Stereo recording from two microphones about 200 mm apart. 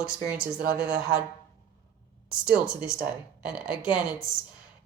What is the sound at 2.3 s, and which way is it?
Speech, 5° right (ahead or behind).